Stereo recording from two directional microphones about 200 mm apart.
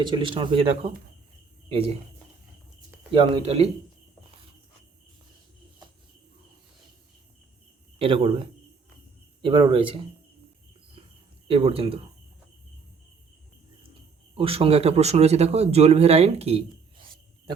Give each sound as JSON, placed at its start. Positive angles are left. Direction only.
{"t": 0.0, "sound": "speech", "side_deg": -25}
{"t": 3.1, "sound": "speech", "side_deg": -25}
{"t": 7.9, "sound": "speech", "side_deg": -30}
{"t": 11.4, "sound": "speech", "side_deg": -30}
{"t": 14.3, "sound": "speech", "side_deg": -30}